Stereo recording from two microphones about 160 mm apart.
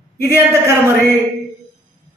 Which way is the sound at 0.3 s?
15° right (ahead or behind).